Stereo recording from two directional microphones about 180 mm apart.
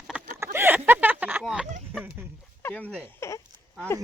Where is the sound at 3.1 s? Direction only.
15° left (ahead or behind).